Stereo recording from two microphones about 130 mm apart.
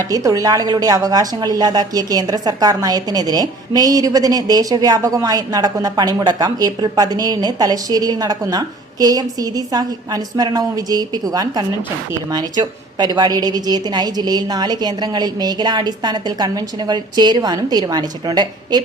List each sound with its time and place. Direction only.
0.1 s a woman's voice: 25° right (ahead or behind)